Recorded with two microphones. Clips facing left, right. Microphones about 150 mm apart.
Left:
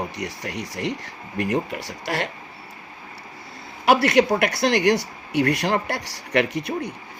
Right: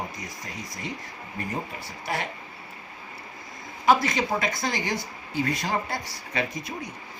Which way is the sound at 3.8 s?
80° left.